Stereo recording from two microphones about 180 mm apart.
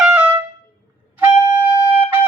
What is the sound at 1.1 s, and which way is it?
Music, 10° right (ahead or behind).